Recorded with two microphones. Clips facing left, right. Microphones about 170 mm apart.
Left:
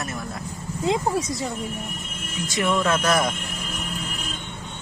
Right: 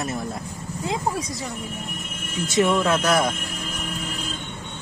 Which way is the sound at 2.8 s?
10° right (ahead or behind).